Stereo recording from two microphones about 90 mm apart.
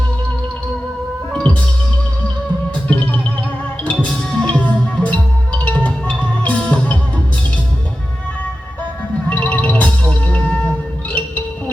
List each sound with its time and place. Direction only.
1.3 s music: 10° left (ahead or behind)
2.9 s music: 15° left (ahead or behind)
9.3 s music: 15° left (ahead or behind)